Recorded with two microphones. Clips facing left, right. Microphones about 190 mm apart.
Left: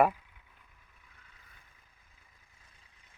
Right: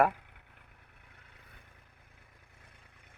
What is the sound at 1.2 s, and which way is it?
Vehicle, 65° right (ahead or behind).